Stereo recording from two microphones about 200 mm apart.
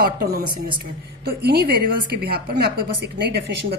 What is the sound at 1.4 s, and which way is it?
A woman's voice, 50° right (ahead or behind).